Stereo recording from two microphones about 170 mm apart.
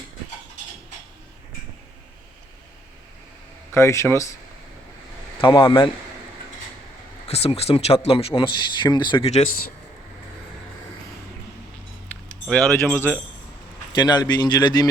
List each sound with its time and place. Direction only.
3.8 s speech: 15° left (ahead or behind)
5.4 s speech: 30° left (ahead or behind)
7.3 s speech: 35° left (ahead or behind)
12.5 s speech: 5° left (ahead or behind)
13.0 s speech: 15° left (ahead or behind)
13.9 s speech: 25° left (ahead or behind)